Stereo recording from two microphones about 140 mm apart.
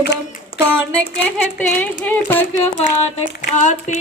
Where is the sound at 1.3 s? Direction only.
10° left (ahead or behind).